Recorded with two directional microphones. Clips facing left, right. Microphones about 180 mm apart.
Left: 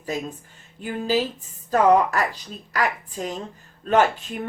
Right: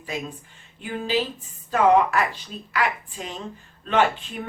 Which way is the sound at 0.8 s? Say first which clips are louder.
Left 2 dB; 40° left (ahead or behind).